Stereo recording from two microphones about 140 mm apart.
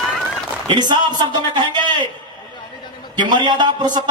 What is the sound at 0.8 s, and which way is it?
Speech, 30° right (ahead or behind).